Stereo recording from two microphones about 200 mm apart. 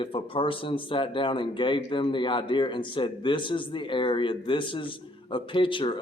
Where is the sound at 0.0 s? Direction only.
25° left (ahead or behind).